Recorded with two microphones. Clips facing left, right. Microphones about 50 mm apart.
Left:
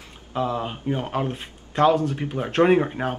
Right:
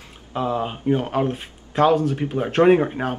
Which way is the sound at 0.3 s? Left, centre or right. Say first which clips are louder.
Right 2 dB; centre.